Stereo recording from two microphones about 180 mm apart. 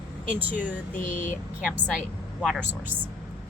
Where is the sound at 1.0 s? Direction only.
45° left (ahead or behind).